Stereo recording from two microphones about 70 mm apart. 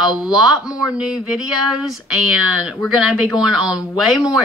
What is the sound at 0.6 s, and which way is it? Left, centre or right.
Speech, left.